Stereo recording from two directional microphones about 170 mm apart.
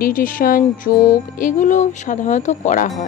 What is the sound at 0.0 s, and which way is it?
Speech, 55° left (ahead or behind).